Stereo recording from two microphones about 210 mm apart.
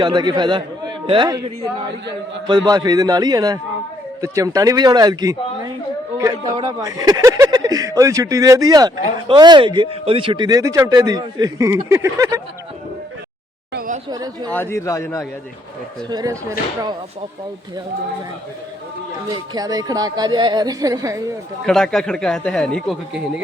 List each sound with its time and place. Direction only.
0.0 s a man's voice: 20° right (ahead or behind)
13.7 s a sound: 40° right (ahead or behind)
14.1 s speech: 20° right (ahead or behind)
14.5 s a man's voice: 10° left (ahead or behind)
16.0 s speech: 15° right (ahead or behind)
19.3 s speech: 20° right (ahead or behind)
21.7 s speech: centre (ahead or behind)